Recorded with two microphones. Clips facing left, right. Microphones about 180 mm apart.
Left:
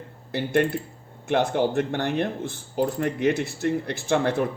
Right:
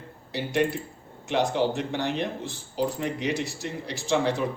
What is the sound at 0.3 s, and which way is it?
Speech, 55° left (ahead or behind).